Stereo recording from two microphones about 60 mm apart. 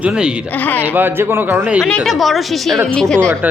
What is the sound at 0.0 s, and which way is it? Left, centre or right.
Speech, centre.